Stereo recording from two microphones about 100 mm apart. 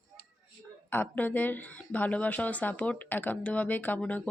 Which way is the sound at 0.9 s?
20° left (ahead or behind).